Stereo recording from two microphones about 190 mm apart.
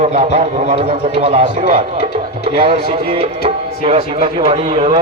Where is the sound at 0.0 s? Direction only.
35° right (ahead or behind).